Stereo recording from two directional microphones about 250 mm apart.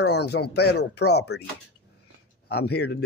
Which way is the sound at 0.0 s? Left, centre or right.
Left.